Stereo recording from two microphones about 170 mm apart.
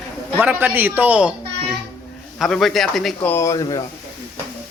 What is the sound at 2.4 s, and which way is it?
Speech, centre (ahead or behind).